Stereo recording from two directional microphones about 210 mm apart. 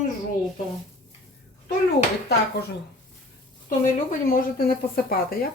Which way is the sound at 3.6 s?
40° left (ahead or behind).